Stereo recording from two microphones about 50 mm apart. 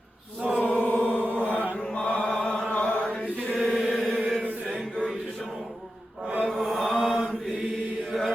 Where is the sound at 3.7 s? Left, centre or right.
Centre.